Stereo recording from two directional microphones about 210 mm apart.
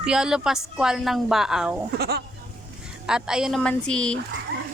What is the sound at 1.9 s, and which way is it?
Speech, 50° right (ahead or behind).